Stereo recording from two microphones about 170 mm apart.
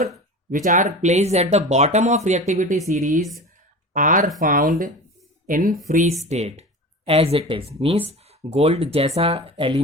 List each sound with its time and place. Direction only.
0.5 s speech: 50° right (ahead or behind); by 9.8 s 35° right (ahead or behind)